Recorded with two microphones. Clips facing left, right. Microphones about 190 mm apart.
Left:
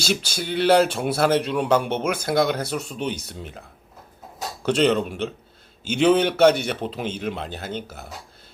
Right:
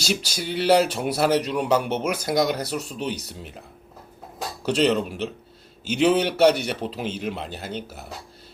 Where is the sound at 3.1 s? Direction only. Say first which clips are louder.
Even; 35° right (ahead or behind).